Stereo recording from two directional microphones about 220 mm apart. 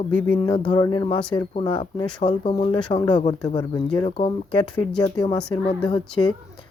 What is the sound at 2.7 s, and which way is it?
Speech, 20° left (ahead or behind).